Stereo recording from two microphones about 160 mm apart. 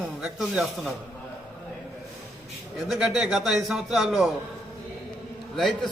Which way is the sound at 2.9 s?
5° right (ahead or behind).